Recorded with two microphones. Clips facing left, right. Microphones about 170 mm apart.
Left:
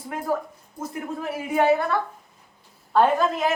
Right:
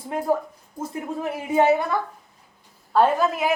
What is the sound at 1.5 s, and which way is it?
Speech, 20° right (ahead or behind).